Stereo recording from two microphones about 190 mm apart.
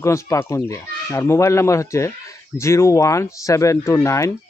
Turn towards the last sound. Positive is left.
turn(degrees=15)  # may be behind; listen again after turning